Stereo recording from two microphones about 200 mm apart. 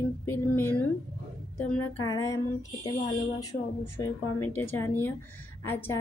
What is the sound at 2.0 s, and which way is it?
Speech, 15° left (ahead or behind).